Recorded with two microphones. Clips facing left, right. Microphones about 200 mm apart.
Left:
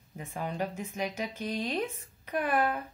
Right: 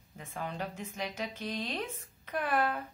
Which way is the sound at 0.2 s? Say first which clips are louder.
Left 4 dB; 15° left (ahead or behind).